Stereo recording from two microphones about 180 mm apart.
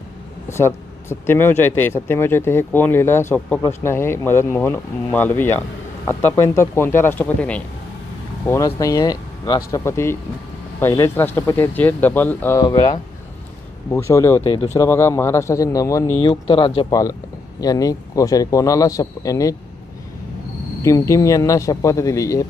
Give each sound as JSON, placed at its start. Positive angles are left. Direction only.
{"t": 0.5, "sound": "speech", "side_deg": 15}
{"t": 14.4, "sound": "speech", "side_deg": 30}
{"t": 14.7, "sound": "speech", "side_deg": 15}
{"t": 16.2, "sound": "speech", "side_deg": 30}
{"t": 20.8, "sound": "speech", "side_deg": 15}